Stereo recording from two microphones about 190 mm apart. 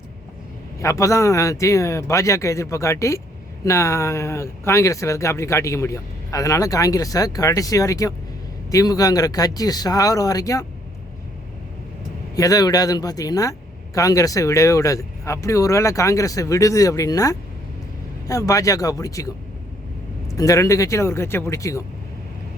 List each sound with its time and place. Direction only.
0.8 s speech: 15° left (ahead or behind)
12.4 s speech: 20° left (ahead or behind)
20.3 s speech: 15° left (ahead or behind)